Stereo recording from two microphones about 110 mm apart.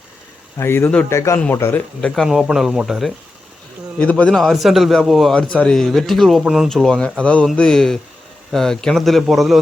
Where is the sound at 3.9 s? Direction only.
10° left (ahead or behind).